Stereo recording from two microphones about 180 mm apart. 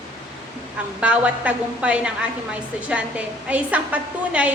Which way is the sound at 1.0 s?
5° right (ahead or behind).